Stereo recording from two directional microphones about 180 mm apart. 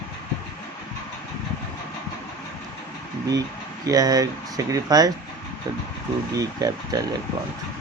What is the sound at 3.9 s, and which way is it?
Speech, 20° right (ahead or behind).